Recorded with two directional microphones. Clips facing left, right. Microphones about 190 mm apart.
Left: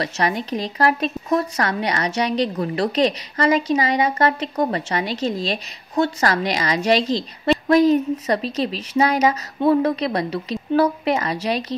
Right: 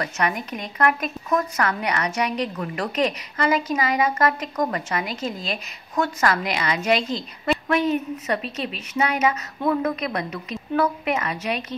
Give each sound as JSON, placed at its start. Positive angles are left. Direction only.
{"t": 0.0, "sound": "speech", "side_deg": 30}